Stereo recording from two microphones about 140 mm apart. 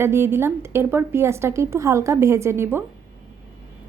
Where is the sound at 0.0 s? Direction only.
20° right (ahead or behind).